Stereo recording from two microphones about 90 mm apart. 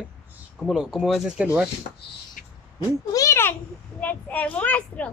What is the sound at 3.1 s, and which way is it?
Speech, 40° left (ahead or behind).